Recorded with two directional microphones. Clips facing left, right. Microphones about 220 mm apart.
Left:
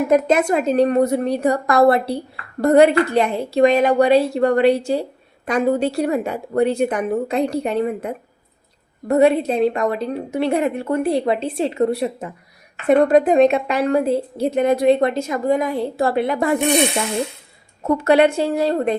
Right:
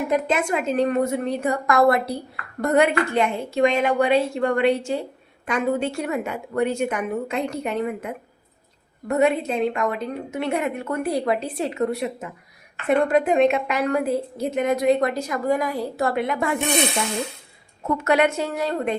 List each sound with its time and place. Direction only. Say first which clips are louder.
0.1 s a woman's voice: left 7 dB; 40° left (ahead or behind)
17.8 s a woman's voice: left 5 dB; 35° left (ahead or behind)